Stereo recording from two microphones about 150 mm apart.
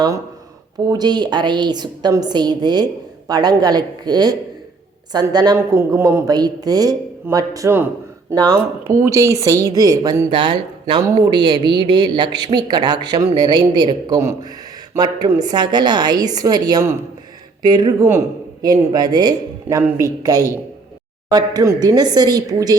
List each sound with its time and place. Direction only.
0.9 s a man's voice: 30° right (ahead or behind)